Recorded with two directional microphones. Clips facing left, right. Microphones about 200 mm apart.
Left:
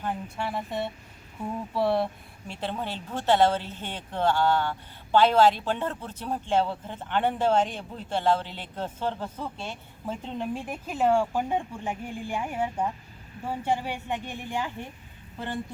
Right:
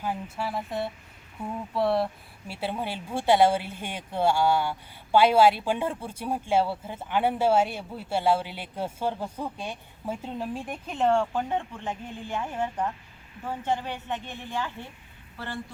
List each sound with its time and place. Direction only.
0.0 s a woman's voice: 5° right (ahead or behind); by 15.6 s 20° left (ahead or behind)